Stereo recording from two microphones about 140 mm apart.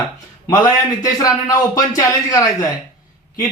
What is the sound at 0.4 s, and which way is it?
A man's voice, 25° left (ahead or behind).